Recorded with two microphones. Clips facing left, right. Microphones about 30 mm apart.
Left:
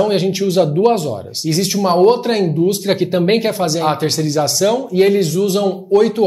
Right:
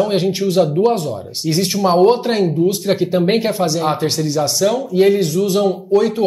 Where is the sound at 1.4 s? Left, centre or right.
Centre.